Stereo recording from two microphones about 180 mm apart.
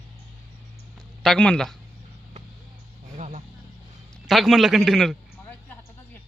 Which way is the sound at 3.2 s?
40° right (ahead or behind).